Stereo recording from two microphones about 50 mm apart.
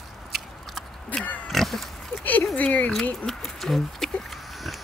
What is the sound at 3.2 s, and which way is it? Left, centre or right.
Goat, centre.